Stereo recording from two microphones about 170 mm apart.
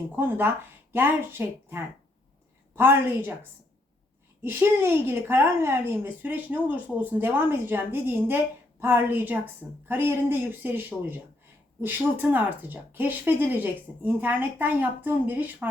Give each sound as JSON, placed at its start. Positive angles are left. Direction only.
{"t": 0.2, "sound": "speech", "side_deg": -10}
{"t": 4.4, "sound": "speech", "side_deg": -15}